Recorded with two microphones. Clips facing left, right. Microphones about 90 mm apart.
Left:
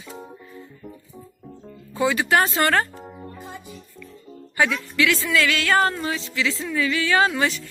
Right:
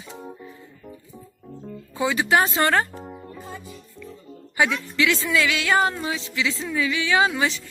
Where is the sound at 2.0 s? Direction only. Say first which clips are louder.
Left 1 dB; 10° right (ahead or behind).